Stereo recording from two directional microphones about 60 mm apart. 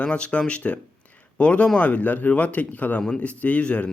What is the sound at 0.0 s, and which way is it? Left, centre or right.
Speech, centre.